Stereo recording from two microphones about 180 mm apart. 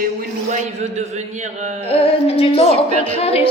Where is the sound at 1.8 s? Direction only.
30° left (ahead or behind).